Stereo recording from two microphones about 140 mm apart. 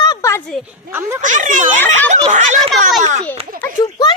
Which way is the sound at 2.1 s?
55° right (ahead or behind).